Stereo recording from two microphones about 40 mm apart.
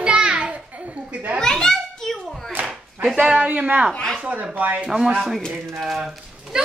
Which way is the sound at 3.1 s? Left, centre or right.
Right.